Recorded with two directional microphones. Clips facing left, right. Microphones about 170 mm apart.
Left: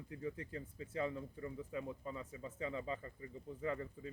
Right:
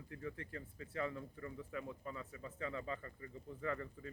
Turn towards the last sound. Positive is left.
turn(degrees=20)  # may be behind; listen again after turning